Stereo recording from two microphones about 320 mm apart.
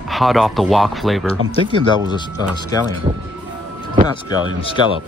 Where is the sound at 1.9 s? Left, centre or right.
Centre.